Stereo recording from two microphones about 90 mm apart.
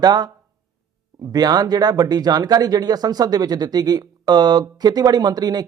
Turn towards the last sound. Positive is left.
turn(degrees=-50)  # may be behind; listen again after turning